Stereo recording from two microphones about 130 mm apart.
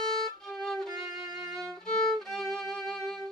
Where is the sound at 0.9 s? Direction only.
20° right (ahead or behind).